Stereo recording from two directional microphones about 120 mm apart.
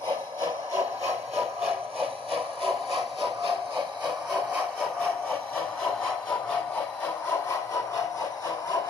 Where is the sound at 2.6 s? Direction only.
Centre (ahead or behind).